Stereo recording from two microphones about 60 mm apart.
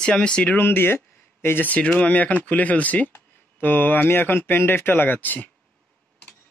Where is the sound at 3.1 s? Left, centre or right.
Left.